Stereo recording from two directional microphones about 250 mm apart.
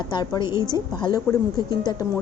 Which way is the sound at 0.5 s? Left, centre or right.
Centre.